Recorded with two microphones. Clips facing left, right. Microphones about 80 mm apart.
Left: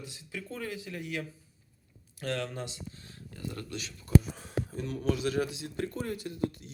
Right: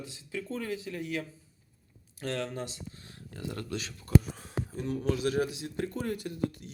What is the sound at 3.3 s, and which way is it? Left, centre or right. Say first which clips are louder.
Speech: right 2 dB; right.